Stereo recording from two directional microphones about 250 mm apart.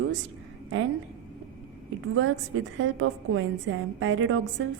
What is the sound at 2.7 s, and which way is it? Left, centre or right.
A woman's voice, right.